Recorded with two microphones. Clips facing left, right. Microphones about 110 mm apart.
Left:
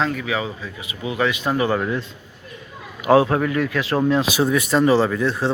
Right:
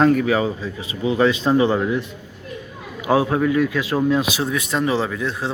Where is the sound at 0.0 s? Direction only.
45° right (ahead or behind); by 2.0 s 15° right (ahead or behind).